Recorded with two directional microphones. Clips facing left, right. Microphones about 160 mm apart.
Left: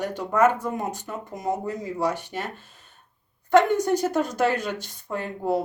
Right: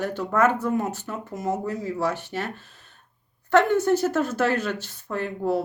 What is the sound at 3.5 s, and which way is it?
Speech, 15° left (ahead or behind).